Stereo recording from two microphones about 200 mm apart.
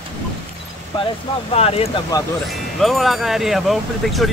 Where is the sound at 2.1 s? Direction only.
20° left (ahead or behind).